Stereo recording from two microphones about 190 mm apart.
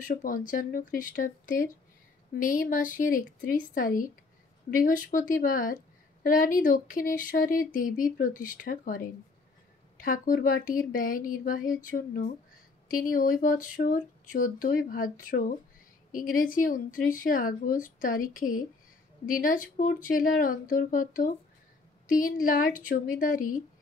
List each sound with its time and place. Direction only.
0.0 s speech: 45° left (ahead or behind)